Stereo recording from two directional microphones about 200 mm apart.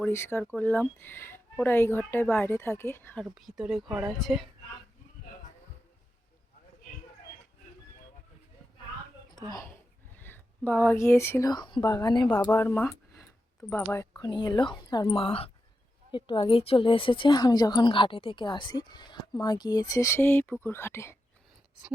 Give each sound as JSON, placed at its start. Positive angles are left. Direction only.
{"t": 0.0, "sound": "speech", "side_deg": 10}
{"t": 3.2, "sound": "speech", "side_deg": 0}
{"t": 3.8, "sound": "speech", "side_deg": -20}
{"t": 4.2, "sound": "speech", "side_deg": 0}
{"t": 9.3, "sound": "a sound", "side_deg": 15}
{"t": 10.2, "sound": "speech", "side_deg": 10}